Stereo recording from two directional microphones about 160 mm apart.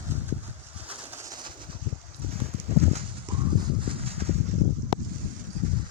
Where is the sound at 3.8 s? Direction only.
35° right (ahead or behind).